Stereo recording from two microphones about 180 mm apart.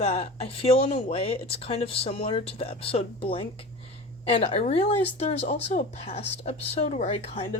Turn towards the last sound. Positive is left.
turn(degrees=35)  # may be behind; listen again after turning